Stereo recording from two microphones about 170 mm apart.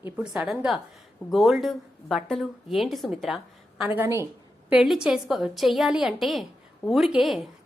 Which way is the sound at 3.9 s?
15° right (ahead or behind).